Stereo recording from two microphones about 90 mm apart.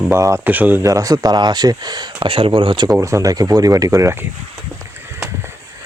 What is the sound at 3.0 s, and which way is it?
Speech, 35° right (ahead or behind).